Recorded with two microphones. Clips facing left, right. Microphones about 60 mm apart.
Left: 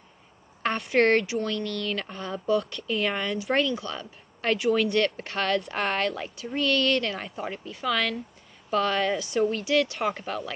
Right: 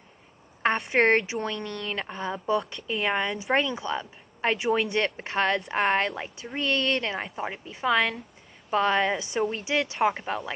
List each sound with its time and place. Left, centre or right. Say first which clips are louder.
0.6 s speech: even; right